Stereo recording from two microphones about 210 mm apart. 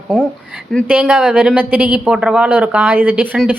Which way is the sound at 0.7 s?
Centre (ahead or behind).